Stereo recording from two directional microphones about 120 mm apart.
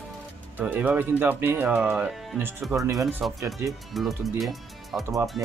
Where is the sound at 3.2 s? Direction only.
Centre (ahead or behind).